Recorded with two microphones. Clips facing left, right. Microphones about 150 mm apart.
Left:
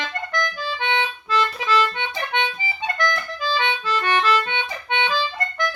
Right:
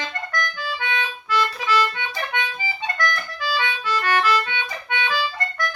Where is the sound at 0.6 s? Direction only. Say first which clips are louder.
Left 3 dB; 25° left (ahead or behind).